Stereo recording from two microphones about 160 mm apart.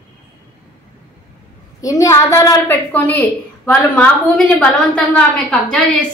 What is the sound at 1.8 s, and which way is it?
A woman's voice, 20° left (ahead or behind).